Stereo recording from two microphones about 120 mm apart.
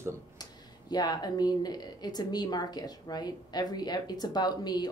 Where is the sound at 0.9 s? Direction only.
35° left (ahead or behind).